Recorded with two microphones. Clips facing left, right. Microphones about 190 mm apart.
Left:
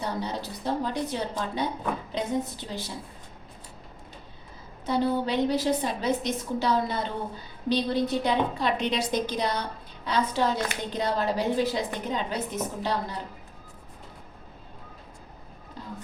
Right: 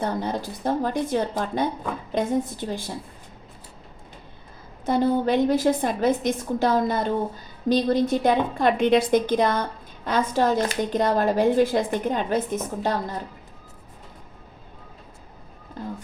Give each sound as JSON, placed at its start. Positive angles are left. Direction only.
{"t": 0.0, "sound": "a woman's voice", "side_deg": -50}
{"t": 4.9, "sound": "a woman's voice", "side_deg": -50}
{"t": 15.8, "sound": "a woman's voice", "side_deg": -50}